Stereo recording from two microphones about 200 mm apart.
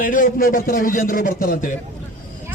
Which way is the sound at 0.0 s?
45° left (ahead or behind).